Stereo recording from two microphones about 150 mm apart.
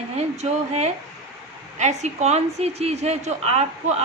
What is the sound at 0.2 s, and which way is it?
A woman's voice, 45° right (ahead or behind).